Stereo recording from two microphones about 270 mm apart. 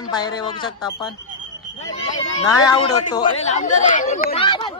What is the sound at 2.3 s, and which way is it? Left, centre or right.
Speech, centre.